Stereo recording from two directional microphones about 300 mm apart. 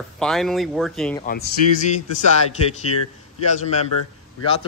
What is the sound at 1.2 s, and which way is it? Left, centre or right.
Speech, left.